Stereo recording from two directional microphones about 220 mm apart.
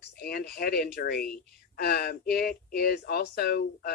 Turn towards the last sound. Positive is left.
turn(degrees=45)  # may be behind; listen again after turning